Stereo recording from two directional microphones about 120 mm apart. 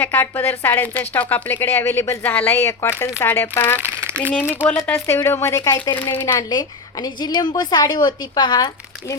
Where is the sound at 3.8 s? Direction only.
20° right (ahead or behind).